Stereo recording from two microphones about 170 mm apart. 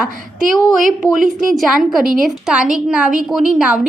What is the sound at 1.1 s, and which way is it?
Speech, 55° right (ahead or behind).